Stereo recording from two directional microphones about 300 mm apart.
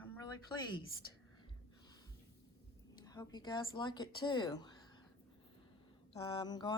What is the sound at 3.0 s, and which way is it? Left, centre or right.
Speech, centre.